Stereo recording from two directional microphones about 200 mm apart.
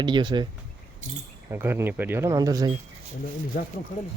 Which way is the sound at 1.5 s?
10° right (ahead or behind).